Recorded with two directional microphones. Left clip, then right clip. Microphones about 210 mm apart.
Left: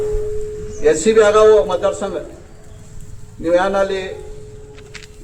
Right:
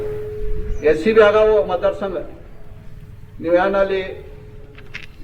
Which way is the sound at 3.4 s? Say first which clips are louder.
Left 1 dB; centre (ahead or behind).